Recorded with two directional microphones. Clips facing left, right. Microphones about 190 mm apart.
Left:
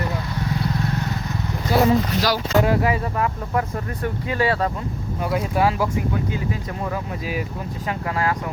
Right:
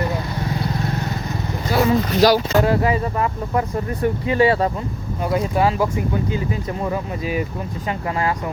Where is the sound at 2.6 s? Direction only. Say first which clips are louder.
Right 2 dB; 10° left (ahead or behind).